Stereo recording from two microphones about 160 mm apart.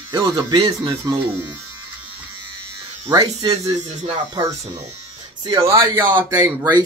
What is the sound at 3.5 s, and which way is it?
Speech, 35° right (ahead or behind).